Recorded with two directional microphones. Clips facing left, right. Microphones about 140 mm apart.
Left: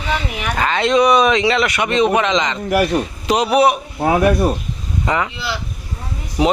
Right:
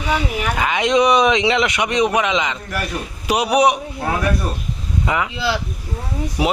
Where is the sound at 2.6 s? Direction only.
70° left (ahead or behind).